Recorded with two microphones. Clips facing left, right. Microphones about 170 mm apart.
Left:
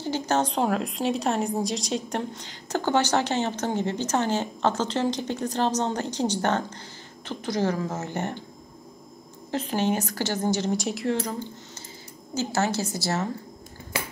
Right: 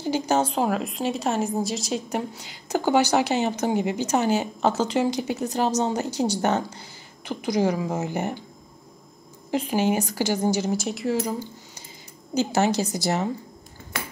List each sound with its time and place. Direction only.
0.0 s a woman's voice: 10° right (ahead or behind)
9.5 s a woman's voice: 10° right (ahead or behind)